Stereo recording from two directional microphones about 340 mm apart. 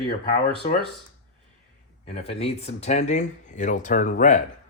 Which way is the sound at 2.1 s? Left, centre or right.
Centre.